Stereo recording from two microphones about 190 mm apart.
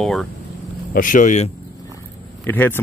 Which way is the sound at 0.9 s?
45° left (ahead or behind).